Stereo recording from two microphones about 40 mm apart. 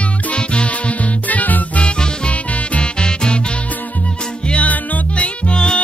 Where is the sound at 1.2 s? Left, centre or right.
Left.